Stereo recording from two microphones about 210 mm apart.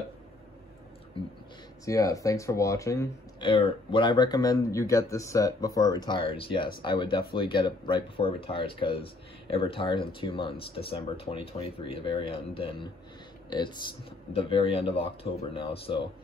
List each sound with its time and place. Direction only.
1.9 s speech: 15° left (ahead or behind)